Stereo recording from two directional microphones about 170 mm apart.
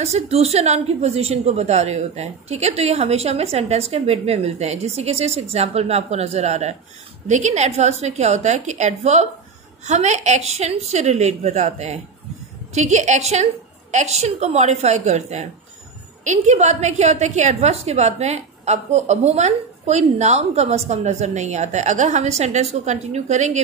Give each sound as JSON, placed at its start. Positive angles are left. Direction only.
{"t": 0.0, "sound": "a woman's voice", "side_deg": -40}